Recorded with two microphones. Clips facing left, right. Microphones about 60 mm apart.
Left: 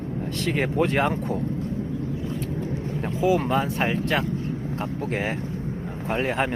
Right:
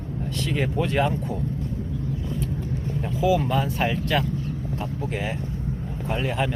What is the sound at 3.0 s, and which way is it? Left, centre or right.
Speech, left.